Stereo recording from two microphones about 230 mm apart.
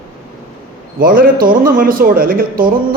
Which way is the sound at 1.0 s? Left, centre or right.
Right.